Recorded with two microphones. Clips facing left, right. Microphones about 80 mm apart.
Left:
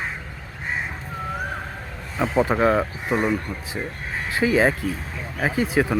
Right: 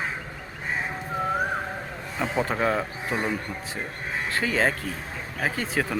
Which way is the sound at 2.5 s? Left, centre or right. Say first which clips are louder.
Left 5 dB; centre.